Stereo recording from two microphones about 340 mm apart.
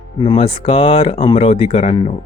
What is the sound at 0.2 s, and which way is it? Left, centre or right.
Speech, centre.